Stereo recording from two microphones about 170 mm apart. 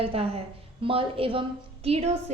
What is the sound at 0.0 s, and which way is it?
A woman's voice, 35° right (ahead or behind).